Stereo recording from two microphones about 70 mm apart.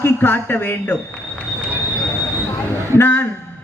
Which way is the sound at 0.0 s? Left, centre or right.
Left.